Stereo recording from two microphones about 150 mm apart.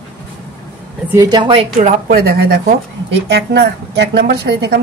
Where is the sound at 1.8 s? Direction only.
55° right (ahead or behind).